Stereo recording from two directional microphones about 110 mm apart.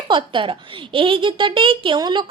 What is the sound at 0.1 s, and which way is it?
A woman's voice, 50° right (ahead or behind).